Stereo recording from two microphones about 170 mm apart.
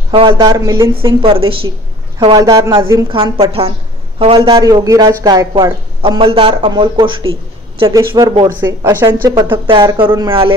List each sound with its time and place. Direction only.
0.1 s a woman's voice: 30° right (ahead or behind)
3.1 s a man's voice: 30° right (ahead or behind)
8.5 s speech: 15° right (ahead or behind)
9.4 s a man's voice: 30° right (ahead or behind)